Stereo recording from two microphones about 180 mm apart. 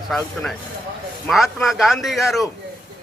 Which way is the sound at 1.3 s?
Centre (ahead or behind).